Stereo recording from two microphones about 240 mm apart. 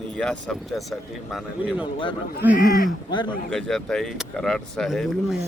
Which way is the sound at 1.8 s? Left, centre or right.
Centre.